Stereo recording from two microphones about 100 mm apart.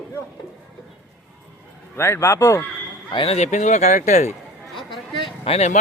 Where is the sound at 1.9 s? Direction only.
25° left (ahead or behind).